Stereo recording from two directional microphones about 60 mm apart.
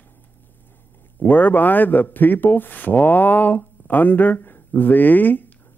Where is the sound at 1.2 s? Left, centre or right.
Left.